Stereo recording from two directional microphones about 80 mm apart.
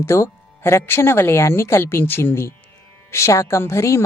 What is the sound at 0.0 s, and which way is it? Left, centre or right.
A woman's voice, left.